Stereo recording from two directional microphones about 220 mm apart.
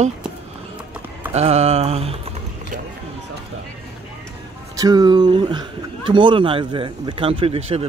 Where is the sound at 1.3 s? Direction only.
30° right (ahead or behind).